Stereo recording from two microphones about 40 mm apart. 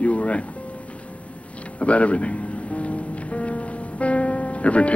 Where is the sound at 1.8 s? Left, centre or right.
Left.